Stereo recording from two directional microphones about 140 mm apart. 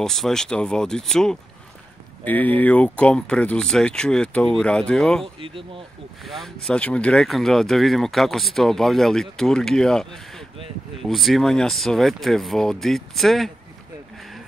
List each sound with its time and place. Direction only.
0.0 s speech: 5° left (ahead or behind)
5.2 s speech: 40° right (ahead or behind)
6.2 s speech: centre (ahead or behind)